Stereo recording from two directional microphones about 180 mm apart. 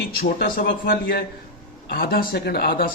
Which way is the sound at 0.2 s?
55° left (ahead or behind).